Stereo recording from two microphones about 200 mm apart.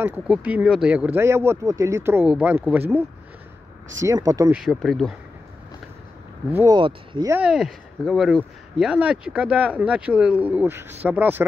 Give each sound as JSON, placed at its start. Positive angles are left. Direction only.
{"t": 0.0, "sound": "speech", "side_deg": -5}
{"t": 4.0, "sound": "speech", "side_deg": -15}
{"t": 4.5, "sound": "speech", "side_deg": 0}
{"t": 6.5, "sound": "speech", "side_deg": -15}
{"t": 7.3, "sound": "speech", "side_deg": 0}